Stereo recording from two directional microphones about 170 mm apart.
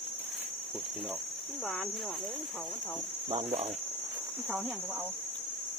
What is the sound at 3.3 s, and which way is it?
Cricket, 35° right (ahead or behind).